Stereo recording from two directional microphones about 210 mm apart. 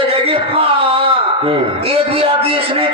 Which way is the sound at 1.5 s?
25° right (ahead or behind).